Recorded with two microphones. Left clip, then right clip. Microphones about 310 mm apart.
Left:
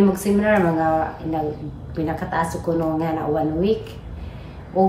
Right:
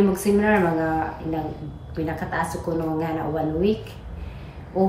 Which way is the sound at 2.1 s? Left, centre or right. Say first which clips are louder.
Left 3 dB; centre.